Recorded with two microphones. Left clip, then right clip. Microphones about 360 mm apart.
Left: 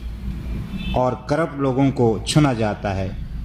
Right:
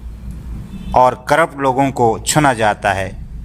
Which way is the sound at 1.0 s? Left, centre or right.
Right.